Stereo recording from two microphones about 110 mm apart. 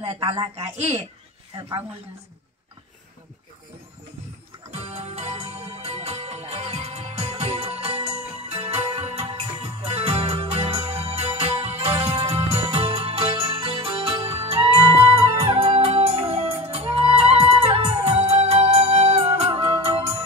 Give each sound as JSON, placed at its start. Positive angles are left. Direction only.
{"t": 0.7, "sound": "speech", "side_deg": -80}
{"t": 4.6, "sound": "music", "side_deg": -70}